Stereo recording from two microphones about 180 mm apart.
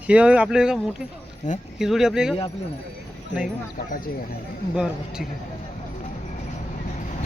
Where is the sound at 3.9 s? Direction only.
50° left (ahead or behind).